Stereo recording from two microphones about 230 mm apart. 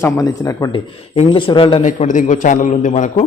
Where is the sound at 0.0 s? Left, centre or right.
Centre; by 3.2 s left.